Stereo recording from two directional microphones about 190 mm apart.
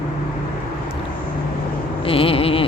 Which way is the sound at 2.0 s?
30° left (ahead or behind).